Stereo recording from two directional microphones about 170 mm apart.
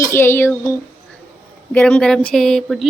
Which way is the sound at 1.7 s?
5° left (ahead or behind).